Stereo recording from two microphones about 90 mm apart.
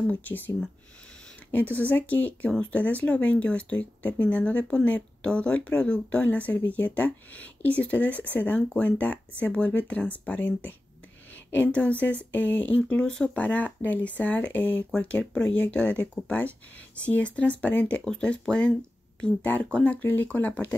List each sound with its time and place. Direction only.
0.1 s speech: 20° left (ahead or behind)
1.5 s speech: 20° left (ahead or behind)